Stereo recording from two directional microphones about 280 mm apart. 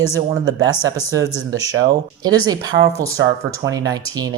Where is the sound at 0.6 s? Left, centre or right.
Right.